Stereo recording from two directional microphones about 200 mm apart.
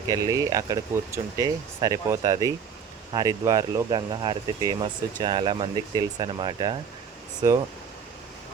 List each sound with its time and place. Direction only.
0.1 s speech: 15° right (ahead or behind)